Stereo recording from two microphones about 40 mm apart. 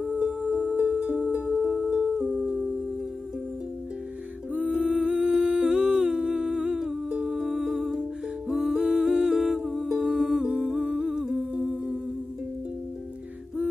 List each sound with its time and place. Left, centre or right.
0.0 s music: right
1.4 s music: centre
4.5 s music: right
4.9 s humming: right
7.2 s music: centre
9.9 s humming: centre